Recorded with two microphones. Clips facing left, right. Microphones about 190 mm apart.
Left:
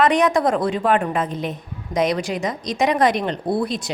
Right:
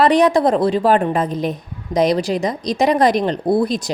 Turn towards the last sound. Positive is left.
turn(degrees=-40)  # may be behind; listen again after turning